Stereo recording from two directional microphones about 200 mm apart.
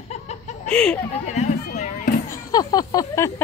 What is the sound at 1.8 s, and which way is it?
Music, 35° left (ahead or behind).